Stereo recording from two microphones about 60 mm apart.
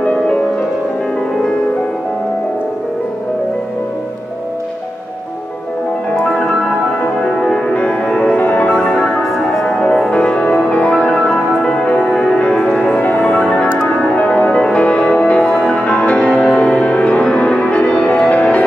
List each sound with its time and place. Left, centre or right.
0.0 s music: centre
6.1 s music: centre
7.7 s music: centre
9.0 s music: centre
13.0 s music: left
13.4 s music: centre